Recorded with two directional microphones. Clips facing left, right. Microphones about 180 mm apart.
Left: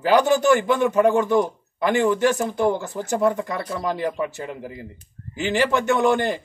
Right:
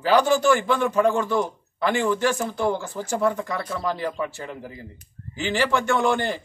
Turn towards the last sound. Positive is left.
turn(degrees=15)  # may be behind; listen again after turning